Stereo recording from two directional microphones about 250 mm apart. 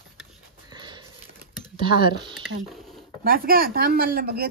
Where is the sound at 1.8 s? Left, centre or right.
Centre.